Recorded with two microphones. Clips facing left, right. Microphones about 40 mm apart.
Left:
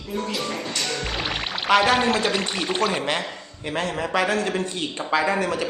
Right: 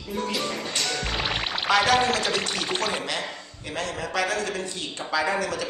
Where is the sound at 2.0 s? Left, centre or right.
Centre.